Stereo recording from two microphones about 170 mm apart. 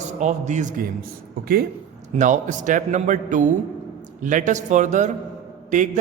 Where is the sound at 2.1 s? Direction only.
45° right (ahead or behind).